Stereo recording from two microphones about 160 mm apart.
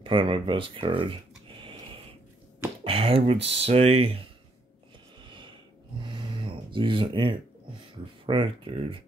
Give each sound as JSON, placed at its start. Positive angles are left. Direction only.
{"t": 0.0, "sound": "speech", "side_deg": -30}
{"t": 2.8, "sound": "speech", "side_deg": -35}
{"t": 6.0, "sound": "a sound", "side_deg": -30}
{"t": 8.3, "sound": "speech", "side_deg": -30}